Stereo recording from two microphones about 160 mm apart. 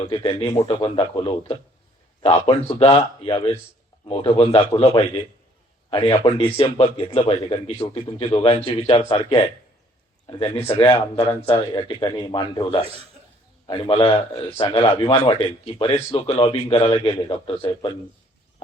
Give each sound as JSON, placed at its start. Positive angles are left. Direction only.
{"t": 0.1, "sound": "a man's voice", "side_deg": 35}